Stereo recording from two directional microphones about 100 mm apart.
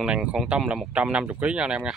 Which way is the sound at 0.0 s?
10° right (ahead or behind).